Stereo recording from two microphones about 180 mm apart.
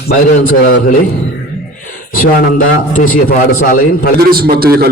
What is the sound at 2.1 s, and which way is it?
A man's voice, 55° left (ahead or behind).